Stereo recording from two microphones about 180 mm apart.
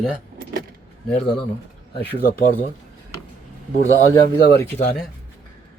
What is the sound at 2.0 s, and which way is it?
Speech, 65° left (ahead or behind).